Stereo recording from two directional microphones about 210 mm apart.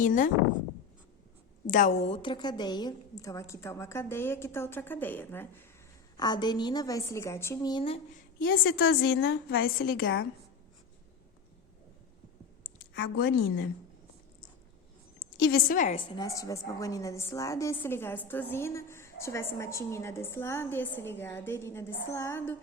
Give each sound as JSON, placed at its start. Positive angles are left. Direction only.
{"t": 0.0, "sound": "a woman's voice", "side_deg": 40}
{"t": 1.6, "sound": "a woman's voice", "side_deg": 40}
{"t": 8.4, "sound": "a woman's voice", "side_deg": 45}
{"t": 12.9, "sound": "a woman's voice", "side_deg": 55}
{"t": 15.4, "sound": "a woman's voice", "side_deg": 55}
{"t": 16.1, "sound": "a woman's voice", "side_deg": 15}